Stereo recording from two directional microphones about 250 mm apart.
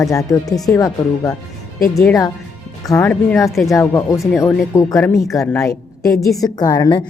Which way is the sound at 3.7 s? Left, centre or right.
Centre.